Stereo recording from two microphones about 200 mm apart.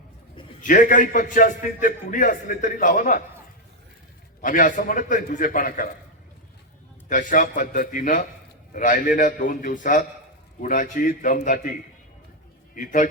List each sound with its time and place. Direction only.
0.6 s a man's voice: 40° left (ahead or behind)
4.4 s a man's voice: 40° left (ahead or behind)
7.1 s a man's voice: 40° left (ahead or behind)
12.7 s a man's voice: 40° left (ahead or behind)